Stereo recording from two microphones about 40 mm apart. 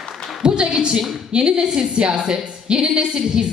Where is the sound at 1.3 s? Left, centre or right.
Right.